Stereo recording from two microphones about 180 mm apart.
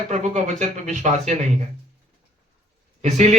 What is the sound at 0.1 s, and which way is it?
Speech, 40° right (ahead or behind).